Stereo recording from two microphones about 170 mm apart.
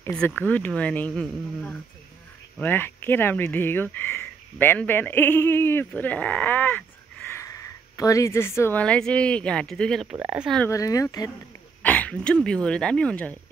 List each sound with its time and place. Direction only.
0.0 s speech: 10° left (ahead or behind)
8.0 s speech: 20° left (ahead or behind); by 10.6 s 5° right (ahead or behind)
10.6 s speech: 20° left (ahead or behind)
11.8 s speech: 10° left (ahead or behind)